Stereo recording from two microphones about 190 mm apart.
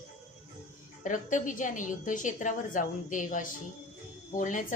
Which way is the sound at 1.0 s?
45° left (ahead or behind).